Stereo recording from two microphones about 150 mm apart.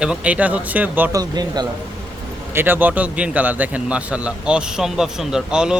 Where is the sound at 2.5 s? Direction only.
15° right (ahead or behind).